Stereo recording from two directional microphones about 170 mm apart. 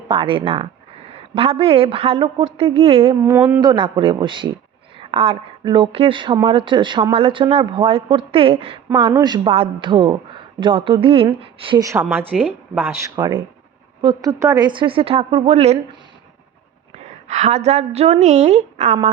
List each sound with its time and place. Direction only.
0.1 s a man's voice: 30° right (ahead or behind)
11.8 s a man's voice: 15° right (ahead or behind); by 15.8 s 40° right (ahead or behind)
16.9 s a woman's voice: 40° right (ahead or behind)